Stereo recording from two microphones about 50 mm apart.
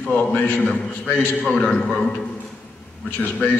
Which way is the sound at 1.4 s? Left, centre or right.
Centre.